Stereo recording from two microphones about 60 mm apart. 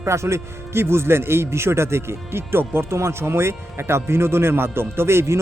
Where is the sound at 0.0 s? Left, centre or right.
Right.